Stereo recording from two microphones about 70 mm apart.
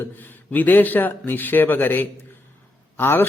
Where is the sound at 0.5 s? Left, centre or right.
Left.